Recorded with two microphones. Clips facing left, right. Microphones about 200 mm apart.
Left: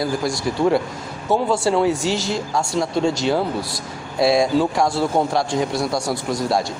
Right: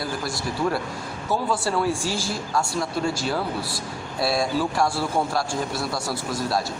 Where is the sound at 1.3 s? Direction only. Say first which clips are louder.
Left 6 dB; 25° left (ahead or behind).